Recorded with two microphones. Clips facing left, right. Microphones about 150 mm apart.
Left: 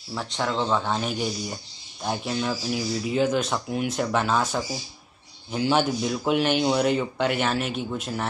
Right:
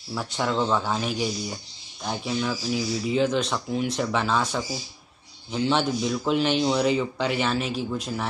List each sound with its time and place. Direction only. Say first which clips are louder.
0.1 s speech: right 1 dB; centre (ahead or behind)